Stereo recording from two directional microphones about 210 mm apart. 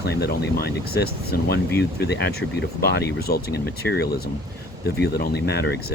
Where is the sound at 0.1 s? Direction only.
50° left (ahead or behind).